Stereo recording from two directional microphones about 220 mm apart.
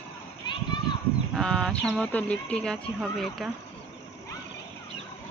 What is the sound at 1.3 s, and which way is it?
Speech, centre (ahead or behind).